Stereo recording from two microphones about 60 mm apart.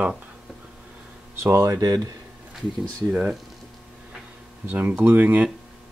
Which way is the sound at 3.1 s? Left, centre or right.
Right.